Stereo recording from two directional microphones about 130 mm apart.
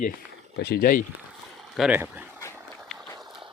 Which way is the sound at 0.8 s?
90° left.